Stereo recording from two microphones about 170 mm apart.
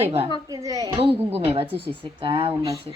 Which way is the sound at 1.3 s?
35° right (ahead or behind).